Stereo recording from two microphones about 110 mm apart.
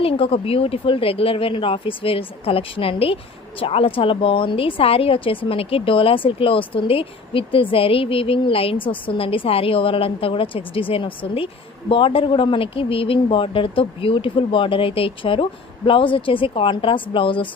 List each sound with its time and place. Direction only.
0.0 s speech: 60° left (ahead or behind)